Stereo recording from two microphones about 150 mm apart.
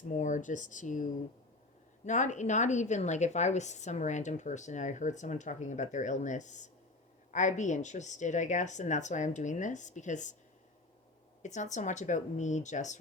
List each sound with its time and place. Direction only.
0.1 s a woman's voice: 55° left (ahead or behind)
11.4 s a woman's voice: 55° left (ahead or behind)